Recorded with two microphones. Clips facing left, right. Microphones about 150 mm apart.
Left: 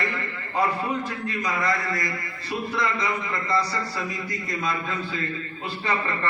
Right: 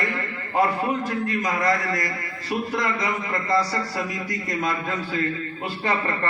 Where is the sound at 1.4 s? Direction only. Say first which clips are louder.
Right 1 dB; 45° right (ahead or behind).